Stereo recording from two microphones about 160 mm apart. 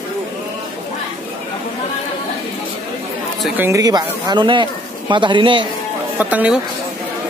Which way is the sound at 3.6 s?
20° right (ahead or behind).